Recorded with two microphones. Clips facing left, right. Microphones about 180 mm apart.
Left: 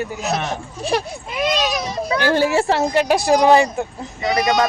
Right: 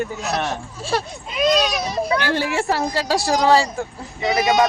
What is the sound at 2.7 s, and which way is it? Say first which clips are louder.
A woman's voice: left 4 dB; 20° left (ahead or behind).